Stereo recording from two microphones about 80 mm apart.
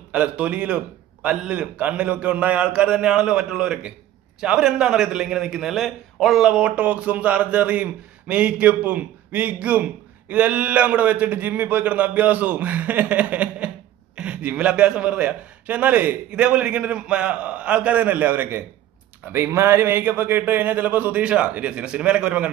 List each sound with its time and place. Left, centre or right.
0.1 s a man's voice: centre